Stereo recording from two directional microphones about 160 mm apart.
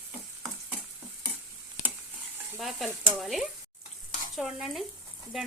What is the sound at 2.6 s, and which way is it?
Speech, centre (ahead or behind).